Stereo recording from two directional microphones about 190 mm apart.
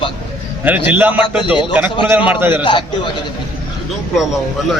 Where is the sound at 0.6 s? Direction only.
10° right (ahead or behind).